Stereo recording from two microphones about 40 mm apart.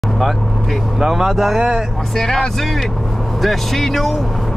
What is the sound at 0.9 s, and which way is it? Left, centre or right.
Speech, centre.